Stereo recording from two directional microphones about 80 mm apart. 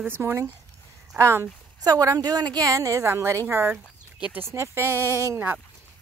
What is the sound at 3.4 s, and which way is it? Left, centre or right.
Speech, right.